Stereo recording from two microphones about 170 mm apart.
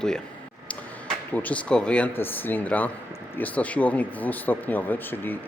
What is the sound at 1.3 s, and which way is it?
Speech, 10° left (ahead or behind).